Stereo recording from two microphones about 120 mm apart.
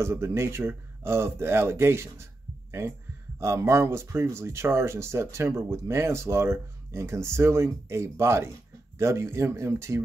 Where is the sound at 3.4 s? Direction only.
25° right (ahead or behind).